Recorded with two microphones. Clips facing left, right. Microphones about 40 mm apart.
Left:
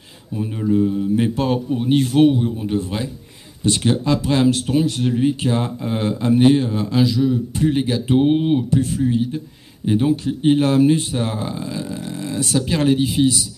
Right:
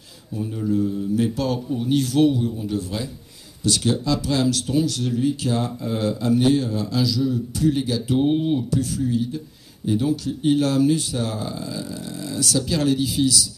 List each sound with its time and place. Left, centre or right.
0.3 s speech: left